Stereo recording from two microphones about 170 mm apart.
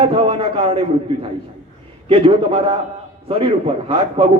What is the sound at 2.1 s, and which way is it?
A man's voice, 30° right (ahead or behind).